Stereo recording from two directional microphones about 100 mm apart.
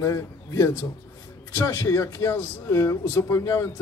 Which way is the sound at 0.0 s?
30° left (ahead or behind).